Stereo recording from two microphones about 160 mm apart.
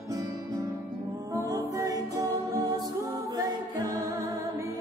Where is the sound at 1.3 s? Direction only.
20° right (ahead or behind).